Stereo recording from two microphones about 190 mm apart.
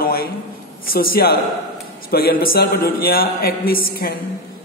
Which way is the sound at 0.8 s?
50° left (ahead or behind).